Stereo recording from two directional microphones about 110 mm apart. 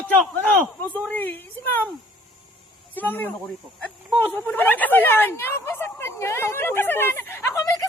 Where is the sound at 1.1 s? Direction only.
15° left (ahead or behind).